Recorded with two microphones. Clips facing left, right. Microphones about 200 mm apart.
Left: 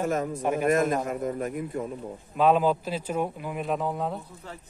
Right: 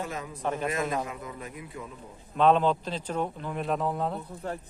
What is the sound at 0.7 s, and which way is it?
A man's voice, 45° left (ahead or behind).